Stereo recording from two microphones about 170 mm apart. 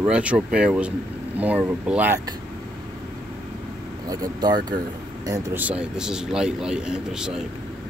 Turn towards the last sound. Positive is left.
turn(degrees=-5)  # may be behind; listen again after turning